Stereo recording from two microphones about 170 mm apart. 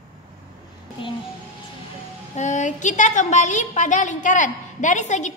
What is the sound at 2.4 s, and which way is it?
A woman's voice, 45° left (ahead or behind).